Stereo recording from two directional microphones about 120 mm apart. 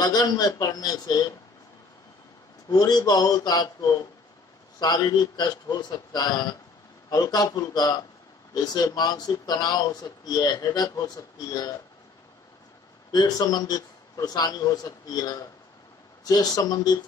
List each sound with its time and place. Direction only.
0.0 s speech: 35° left (ahead or behind)
2.7 s speech: 35° left (ahead or behind)
13.1 s speech: 35° left (ahead or behind)